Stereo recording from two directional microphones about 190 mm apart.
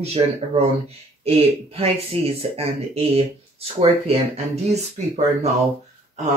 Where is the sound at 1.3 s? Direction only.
30° right (ahead or behind).